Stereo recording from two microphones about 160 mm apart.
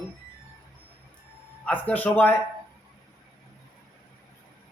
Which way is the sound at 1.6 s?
10° left (ahead or behind).